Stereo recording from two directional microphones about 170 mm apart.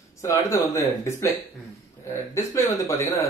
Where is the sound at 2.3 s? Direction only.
15° left (ahead or behind).